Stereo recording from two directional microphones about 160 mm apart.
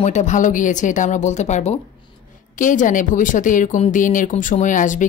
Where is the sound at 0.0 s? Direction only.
50° left (ahead or behind).